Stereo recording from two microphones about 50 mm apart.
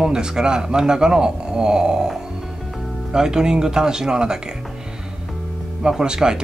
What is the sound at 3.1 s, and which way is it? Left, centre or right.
Speech, centre.